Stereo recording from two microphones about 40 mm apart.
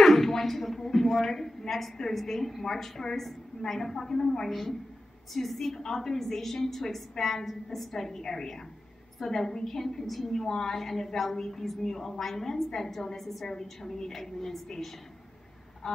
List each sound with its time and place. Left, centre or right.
0.0 s a sound: centre
1.0 s a woman's voice: centre
5.3 s a woman's voice: centre
10.3 s a woman's voice: centre
15.8 s goose: centre